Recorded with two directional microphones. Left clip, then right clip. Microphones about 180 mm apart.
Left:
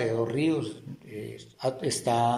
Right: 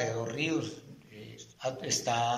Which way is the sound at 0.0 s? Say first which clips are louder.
Left 6 dB; 30° left (ahead or behind).